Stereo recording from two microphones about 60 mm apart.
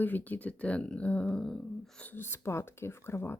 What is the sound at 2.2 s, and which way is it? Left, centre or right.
Speech, left.